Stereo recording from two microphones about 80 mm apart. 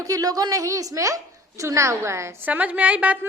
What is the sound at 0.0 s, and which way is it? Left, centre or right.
A woman's voice, right.